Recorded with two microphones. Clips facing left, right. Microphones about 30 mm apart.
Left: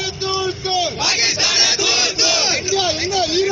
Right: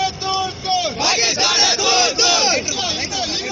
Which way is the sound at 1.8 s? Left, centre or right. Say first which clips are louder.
Right 2 dB; left.